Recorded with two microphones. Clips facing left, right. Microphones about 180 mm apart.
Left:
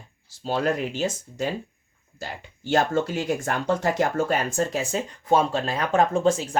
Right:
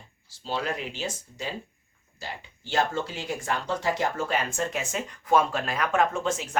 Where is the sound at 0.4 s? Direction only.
45° left (ahead or behind).